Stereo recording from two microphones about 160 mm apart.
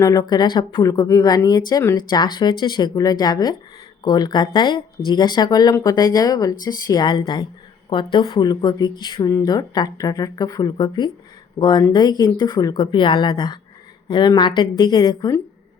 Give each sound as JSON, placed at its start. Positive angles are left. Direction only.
{"t": 0.0, "sound": "speech", "side_deg": 20}